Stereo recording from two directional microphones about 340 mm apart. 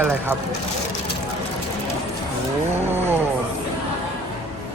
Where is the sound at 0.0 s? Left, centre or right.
Centre.